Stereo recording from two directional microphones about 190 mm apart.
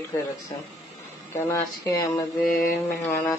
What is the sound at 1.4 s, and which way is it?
Speech, 15° left (ahead or behind).